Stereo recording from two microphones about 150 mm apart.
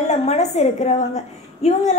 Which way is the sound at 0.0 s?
45° left (ahead or behind).